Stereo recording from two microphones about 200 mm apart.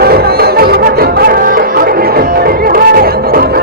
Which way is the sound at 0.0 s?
50° right (ahead or behind).